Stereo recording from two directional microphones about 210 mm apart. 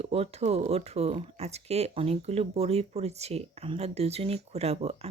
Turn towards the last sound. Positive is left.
turn(degrees=-30)  # may be behind; listen again after turning